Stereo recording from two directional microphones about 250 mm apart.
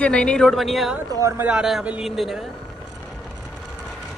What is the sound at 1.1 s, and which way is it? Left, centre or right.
Speech, centre.